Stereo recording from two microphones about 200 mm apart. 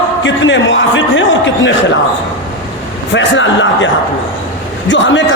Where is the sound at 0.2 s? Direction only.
65° left (ahead or behind).